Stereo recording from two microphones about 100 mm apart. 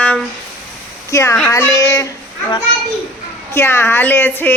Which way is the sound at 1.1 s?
25° left (ahead or behind).